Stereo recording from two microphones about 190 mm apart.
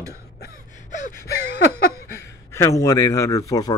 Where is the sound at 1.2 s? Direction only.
60° left (ahead or behind).